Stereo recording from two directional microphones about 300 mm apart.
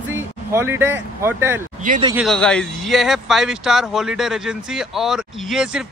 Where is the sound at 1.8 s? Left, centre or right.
Right.